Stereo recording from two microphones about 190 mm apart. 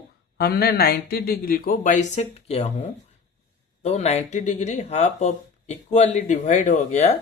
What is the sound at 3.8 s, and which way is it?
Speech, 35° left (ahead or behind).